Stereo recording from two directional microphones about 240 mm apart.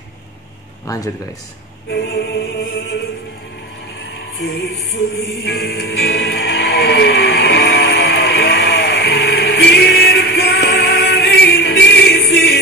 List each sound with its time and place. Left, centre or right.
0.8 s speech: centre
1.9 s music: left
4.4 s music: left